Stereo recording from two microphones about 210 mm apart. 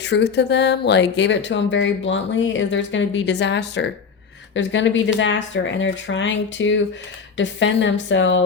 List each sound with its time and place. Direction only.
0.0 s speech: 55° left (ahead or behind)